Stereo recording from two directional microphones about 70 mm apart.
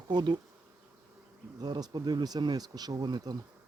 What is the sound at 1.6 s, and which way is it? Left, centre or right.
Speech, right.